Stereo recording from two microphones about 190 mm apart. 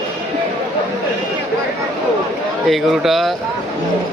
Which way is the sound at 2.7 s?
Centre (ahead or behind).